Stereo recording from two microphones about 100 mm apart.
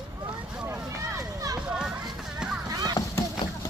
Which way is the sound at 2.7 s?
40° right (ahead or behind).